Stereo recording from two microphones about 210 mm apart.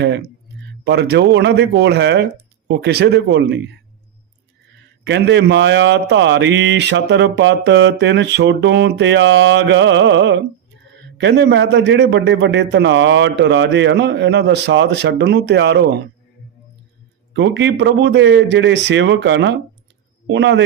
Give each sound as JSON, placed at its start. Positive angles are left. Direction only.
{"t": 0.9, "sound": "a man's voice", "side_deg": -55}
{"t": 5.0, "sound": "a man's voice", "side_deg": -55}
{"t": 17.3, "sound": "a man's voice", "side_deg": -60}